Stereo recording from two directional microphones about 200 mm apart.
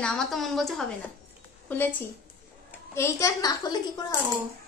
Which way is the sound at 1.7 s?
10° left (ahead or behind).